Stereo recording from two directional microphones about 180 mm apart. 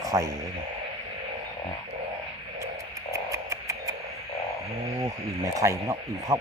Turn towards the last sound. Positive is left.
turn(degrees=-15)  # may be behind; listen again after turning